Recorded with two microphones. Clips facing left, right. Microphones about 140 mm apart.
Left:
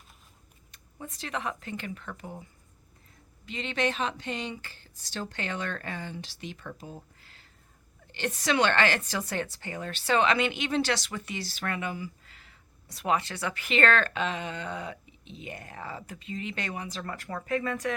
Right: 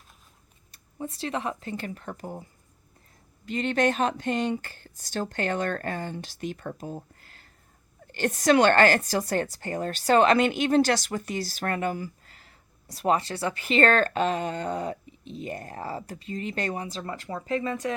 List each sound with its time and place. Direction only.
0.7 s speech: 30° right (ahead or behind)
3.4 s a woman's voice: 45° right (ahead or behind)
16.8 s speech: 25° right (ahead or behind)